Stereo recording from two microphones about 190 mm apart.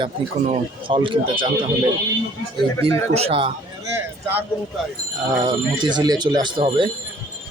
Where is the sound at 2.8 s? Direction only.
30° right (ahead or behind).